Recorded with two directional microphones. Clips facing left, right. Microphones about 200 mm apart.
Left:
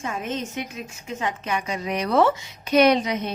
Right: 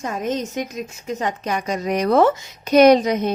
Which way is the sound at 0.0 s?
40° right (ahead or behind).